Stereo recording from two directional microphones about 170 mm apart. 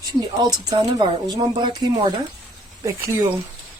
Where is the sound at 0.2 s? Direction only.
20° right (ahead or behind).